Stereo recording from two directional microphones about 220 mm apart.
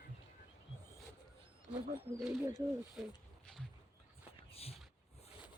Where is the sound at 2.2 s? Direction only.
5° right (ahead or behind).